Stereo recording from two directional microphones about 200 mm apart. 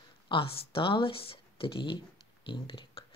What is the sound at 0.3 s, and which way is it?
Speech, 25° left (ahead or behind).